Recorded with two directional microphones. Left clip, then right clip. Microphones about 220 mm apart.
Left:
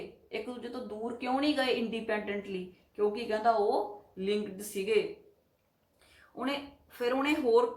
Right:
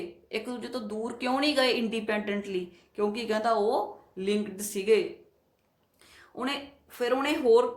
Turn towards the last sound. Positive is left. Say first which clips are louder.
# right 4 dB
turn(degrees=-45)  # may be behind; listen again after turning